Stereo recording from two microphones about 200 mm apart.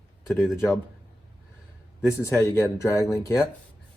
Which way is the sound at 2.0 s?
15° left (ahead or behind).